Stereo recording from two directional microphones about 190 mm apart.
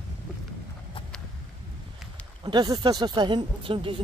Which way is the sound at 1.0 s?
25° left (ahead or behind).